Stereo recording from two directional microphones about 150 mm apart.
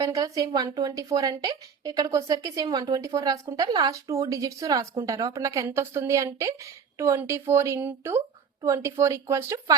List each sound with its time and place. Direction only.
0.0 s speech: 25° right (ahead or behind)